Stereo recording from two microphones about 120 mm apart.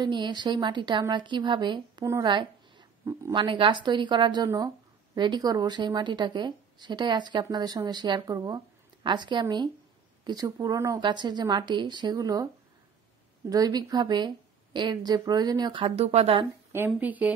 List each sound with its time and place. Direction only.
0.0 s speech: 40° right (ahead or behind)
3.1 s speech: 25° right (ahead or behind)
3.3 s speech: 45° right (ahead or behind)
13.5 s speech: 30° right (ahead or behind); by 16.4 s 55° right (ahead or behind)
16.7 s speech: 15° right (ahead or behind)